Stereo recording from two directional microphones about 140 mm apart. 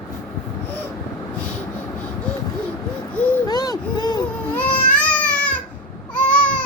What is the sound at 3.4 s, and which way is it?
Speech, 25° left (ahead or behind).